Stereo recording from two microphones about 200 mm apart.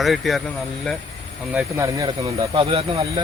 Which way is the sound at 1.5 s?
10° right (ahead or behind).